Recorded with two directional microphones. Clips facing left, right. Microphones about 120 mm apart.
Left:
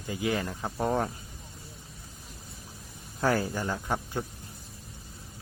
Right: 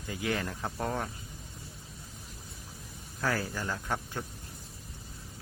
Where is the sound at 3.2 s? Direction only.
25° left (ahead or behind).